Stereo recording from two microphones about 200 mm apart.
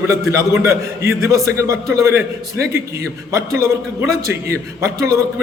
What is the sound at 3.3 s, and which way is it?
A man's voice, 15° right (ahead or behind).